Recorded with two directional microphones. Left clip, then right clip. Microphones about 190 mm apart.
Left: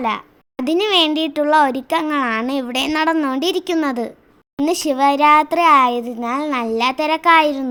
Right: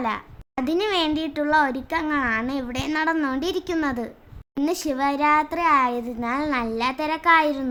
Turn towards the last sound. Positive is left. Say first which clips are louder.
# left 5 dB
turn(degrees=30)  # may be behind; listen again after turning